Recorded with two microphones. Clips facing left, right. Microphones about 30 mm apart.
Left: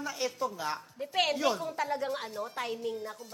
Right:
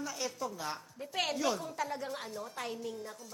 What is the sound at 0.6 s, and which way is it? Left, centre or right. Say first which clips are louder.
A woman's voice: left 5 dB; centre.